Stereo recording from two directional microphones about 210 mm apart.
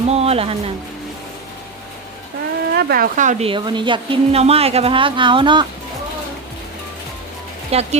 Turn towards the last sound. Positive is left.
turn(degrees=-30)  # may be behind; listen again after turning